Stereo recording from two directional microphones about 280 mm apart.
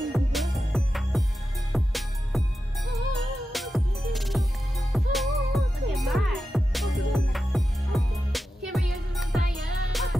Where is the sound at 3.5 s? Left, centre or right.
Centre.